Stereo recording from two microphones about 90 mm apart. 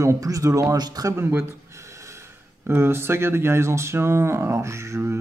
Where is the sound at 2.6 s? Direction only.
25° right (ahead or behind).